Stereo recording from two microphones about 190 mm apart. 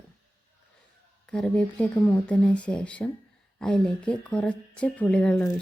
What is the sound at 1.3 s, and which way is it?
Speech, 5° left (ahead or behind).